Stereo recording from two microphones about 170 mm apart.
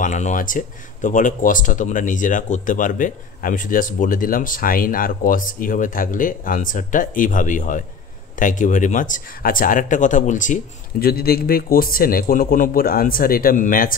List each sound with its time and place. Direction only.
0.0 s speech: 45° left (ahead or behind)